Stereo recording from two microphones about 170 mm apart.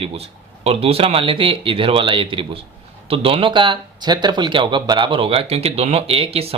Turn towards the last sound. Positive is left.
turn(degrees=-35)  # may be behind; listen again after turning